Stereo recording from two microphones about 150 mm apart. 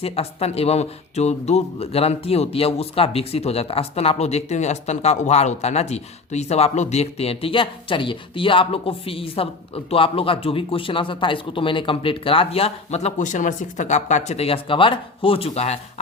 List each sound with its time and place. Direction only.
0.0 s speech: 40° left (ahead or behind)